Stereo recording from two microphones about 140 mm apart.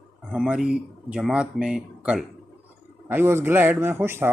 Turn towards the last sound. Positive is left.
turn(degrees=-15)  # may be behind; listen again after turning